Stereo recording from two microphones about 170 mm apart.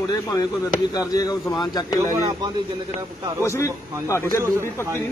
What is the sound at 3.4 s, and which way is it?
A man's voice, 15° left (ahead or behind).